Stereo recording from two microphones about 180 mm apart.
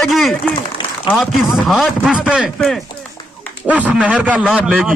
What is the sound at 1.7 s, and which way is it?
A man's voice, centre (ahead or behind).